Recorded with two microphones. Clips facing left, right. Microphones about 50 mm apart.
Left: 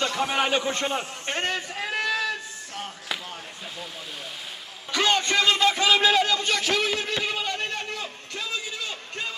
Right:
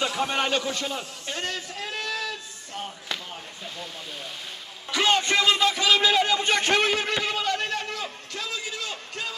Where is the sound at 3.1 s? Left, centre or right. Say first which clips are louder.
Left 1 dB; centre.